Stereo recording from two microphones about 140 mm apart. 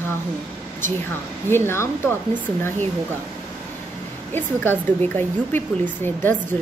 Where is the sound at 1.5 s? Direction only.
15° left (ahead or behind).